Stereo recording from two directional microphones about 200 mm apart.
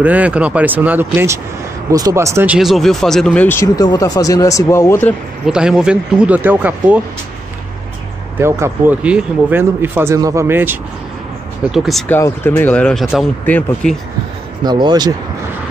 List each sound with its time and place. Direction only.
0.0 s speech: 5° right (ahead or behind); by 5.1 s 10° left (ahead or behind)
5.5 s speech: 5° right (ahead or behind)
8.4 s speech: 15° right (ahead or behind)
11.7 s speech: centre (ahead or behind)
14.6 s speech: 20° right (ahead or behind)